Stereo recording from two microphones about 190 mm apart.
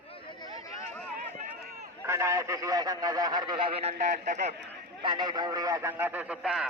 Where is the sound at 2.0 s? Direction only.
15° right (ahead or behind); by 4.6 s 40° right (ahead or behind).